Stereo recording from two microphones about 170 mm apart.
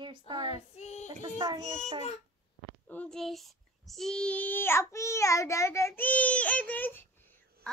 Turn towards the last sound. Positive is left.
turn(degrees=10)  # may be behind; listen again after turning